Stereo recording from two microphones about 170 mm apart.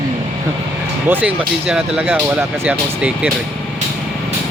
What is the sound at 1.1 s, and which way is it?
Speech, 5° right (ahead or behind).